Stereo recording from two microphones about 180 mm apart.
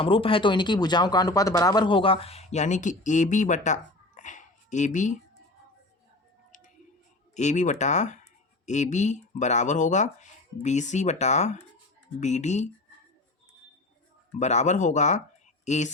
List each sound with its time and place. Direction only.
0.0 s speech: 30° left (ahead or behind)
7.3 s speech: 40° left (ahead or behind)
14.3 s speech: 40° left (ahead or behind)